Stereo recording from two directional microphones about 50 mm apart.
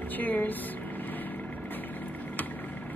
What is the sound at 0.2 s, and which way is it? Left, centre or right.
Speech, left.